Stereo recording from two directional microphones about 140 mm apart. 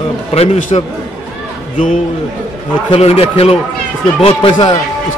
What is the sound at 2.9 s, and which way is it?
A man's voice, 45° left (ahead or behind).